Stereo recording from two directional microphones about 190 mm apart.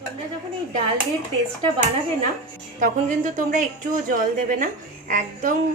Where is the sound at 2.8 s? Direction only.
40° right (ahead or behind).